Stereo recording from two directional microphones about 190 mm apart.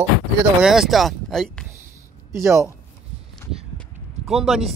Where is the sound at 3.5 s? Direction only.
Centre (ahead or behind).